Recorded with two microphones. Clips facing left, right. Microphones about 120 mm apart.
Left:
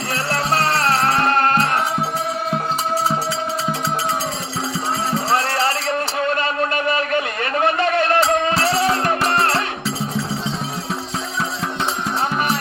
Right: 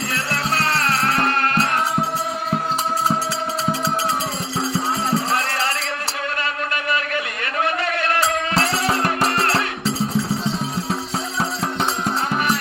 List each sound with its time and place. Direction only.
0.1 s music: 35° left (ahead or behind)
5.3 s music: 40° left (ahead or behind)
6.4 s a sound: 30° left (ahead or behind)
8.6 s music: 35° left (ahead or behind)